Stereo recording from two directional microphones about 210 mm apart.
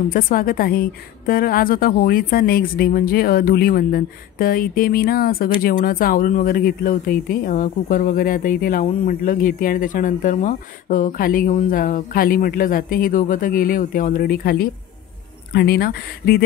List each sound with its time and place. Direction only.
0.1 s a woman's voice: 40° left (ahead or behind)